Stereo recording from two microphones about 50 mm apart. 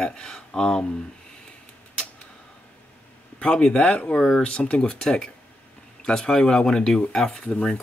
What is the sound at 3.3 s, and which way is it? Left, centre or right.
Speech, centre.